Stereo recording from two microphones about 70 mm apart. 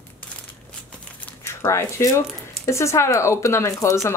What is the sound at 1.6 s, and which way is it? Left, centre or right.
Speech, left.